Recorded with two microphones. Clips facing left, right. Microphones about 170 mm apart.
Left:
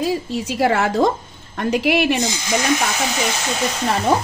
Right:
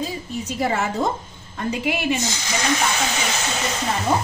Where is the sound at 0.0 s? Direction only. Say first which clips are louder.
Left 7 dB; 80° left.